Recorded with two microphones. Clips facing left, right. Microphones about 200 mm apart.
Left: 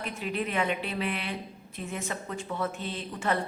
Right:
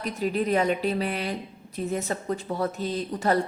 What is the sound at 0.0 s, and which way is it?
A woman's voice, 40° right (ahead or behind).